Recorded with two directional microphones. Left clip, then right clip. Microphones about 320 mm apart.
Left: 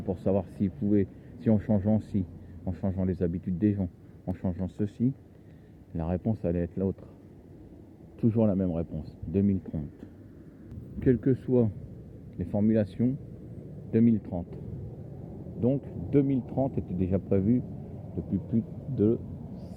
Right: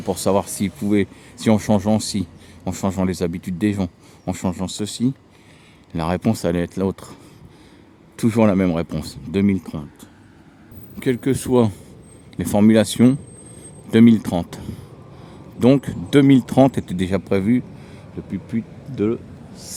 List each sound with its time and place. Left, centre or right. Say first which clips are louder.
0.1 s speech: right 10 dB; centre
8.2 s speech: right 10 dB; right
11.0 s speech: right 5 dB; centre
15.6 s speech: right 13 dB; right; by 19.6 s centre